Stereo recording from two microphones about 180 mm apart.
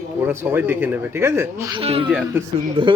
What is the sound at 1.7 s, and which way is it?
Speech, 30° right (ahead or behind).